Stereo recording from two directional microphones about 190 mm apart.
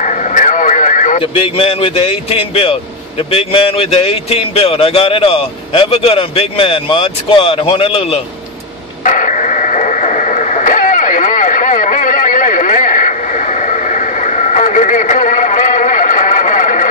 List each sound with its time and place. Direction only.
0.0 s radio: 40° left (ahead or behind)
1.2 s speech: 30° left (ahead or behind)
9.0 s radio: 40° left (ahead or behind)